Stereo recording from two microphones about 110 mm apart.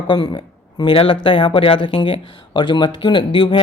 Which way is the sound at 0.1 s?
45° left (ahead or behind).